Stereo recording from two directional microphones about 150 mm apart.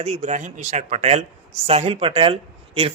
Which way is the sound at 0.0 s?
45° right (ahead or behind).